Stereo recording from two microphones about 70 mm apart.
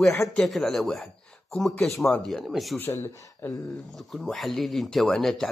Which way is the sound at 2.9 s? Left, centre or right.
Left.